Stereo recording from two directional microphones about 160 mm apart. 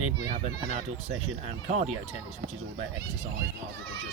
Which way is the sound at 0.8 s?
45° right (ahead or behind).